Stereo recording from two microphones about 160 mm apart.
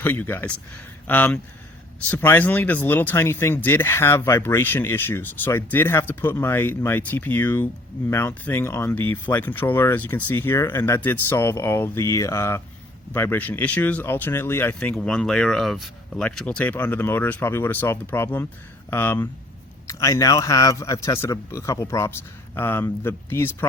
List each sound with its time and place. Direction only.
0.0 s speech: 10° left (ahead or behind)